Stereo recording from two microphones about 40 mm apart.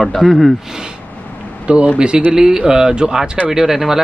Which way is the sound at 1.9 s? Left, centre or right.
Right.